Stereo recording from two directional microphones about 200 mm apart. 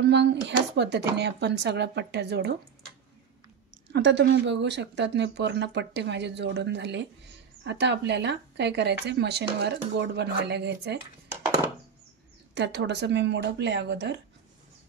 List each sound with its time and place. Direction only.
0.0 s speech: 60° right (ahead or behind)
3.9 s speech: 60° right (ahead or behind)
12.5 s speech: 60° right (ahead or behind)